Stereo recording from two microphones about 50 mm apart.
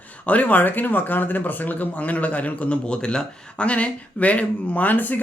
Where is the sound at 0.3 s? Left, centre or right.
Left.